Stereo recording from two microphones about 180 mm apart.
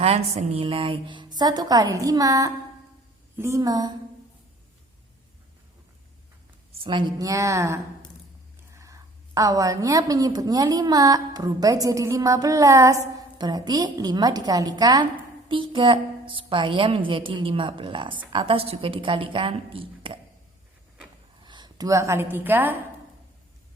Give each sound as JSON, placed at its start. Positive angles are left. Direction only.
{"t": 0.0, "sound": "a woman's voice", "side_deg": -35}
{"t": 6.8, "sound": "a woman's voice", "side_deg": -25}
{"t": 21.4, "sound": "a woman's voice", "side_deg": -25}